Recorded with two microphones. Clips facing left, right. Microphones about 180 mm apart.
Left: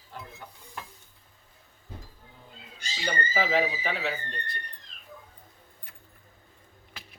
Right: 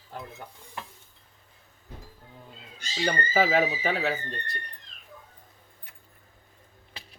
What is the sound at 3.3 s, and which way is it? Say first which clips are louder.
Speech: right 3 dB; 50° right (ahead or behind).